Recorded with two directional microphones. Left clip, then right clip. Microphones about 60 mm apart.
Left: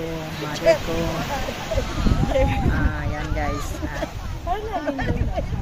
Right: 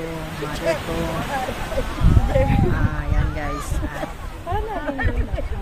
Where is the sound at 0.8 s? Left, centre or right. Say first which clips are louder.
Even; left.